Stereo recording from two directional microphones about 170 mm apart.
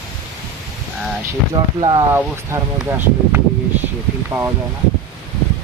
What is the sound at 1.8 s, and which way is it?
Speech, 30° right (ahead or behind).